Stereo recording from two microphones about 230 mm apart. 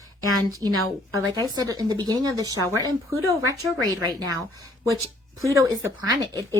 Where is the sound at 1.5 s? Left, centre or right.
Centre.